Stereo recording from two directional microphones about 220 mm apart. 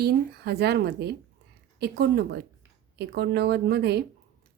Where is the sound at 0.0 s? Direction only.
45° right (ahead or behind).